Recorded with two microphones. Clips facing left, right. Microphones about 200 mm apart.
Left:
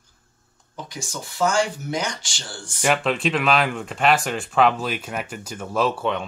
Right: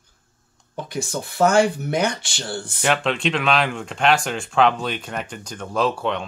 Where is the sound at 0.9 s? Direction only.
60° right (ahead or behind).